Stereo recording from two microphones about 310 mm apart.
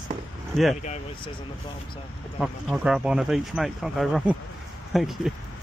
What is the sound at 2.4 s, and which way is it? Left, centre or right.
Speech, centre.